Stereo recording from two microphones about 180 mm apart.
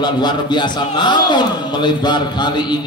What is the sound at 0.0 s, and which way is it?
A man's voice, 25° left (ahead or behind).